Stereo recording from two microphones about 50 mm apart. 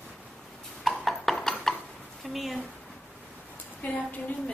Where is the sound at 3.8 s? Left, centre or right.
Left.